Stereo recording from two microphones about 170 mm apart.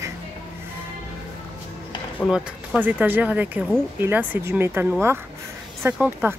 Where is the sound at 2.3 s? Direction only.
10° right (ahead or behind).